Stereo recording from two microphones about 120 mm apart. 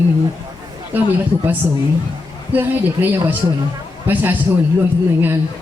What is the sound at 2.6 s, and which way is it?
Speech, 15° right (ahead or behind).